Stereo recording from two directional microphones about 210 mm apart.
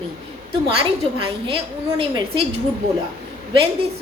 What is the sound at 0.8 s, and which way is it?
A woman's voice, 25° right (ahead or behind).